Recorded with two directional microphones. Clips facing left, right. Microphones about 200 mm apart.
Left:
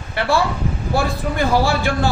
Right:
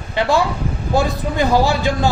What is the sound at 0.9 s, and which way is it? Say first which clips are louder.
A man's voice: right 3 dB; 15° right (ahead or behind).